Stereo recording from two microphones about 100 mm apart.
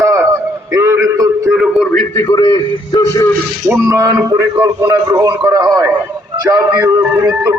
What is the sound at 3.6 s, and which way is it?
Music, 25° right (ahead or behind).